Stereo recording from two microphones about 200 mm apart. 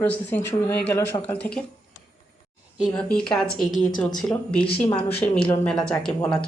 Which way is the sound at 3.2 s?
5° left (ahead or behind).